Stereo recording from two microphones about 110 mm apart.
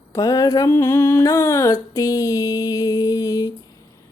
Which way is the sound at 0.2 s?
35° left (ahead or behind).